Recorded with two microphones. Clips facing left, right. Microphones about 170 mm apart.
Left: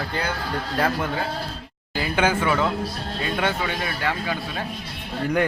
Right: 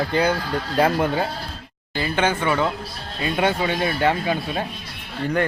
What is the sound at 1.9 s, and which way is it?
Speech, 10° left (ahead or behind).